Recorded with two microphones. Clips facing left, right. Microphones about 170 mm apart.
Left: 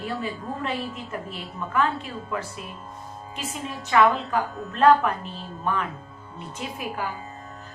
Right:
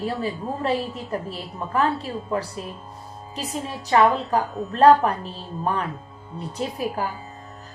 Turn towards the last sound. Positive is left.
turn(degrees=-35)  # may be behind; listen again after turning